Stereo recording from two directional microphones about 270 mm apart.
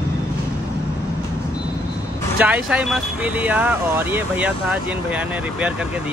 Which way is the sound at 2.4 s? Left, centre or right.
Centre.